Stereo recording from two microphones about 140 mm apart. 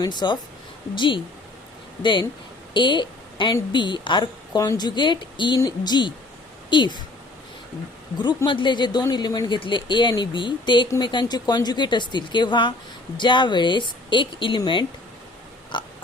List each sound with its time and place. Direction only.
0.0 s a woman's voice: 30° left (ahead or behind)
8.4 s a woman's voice: 35° left (ahead or behind)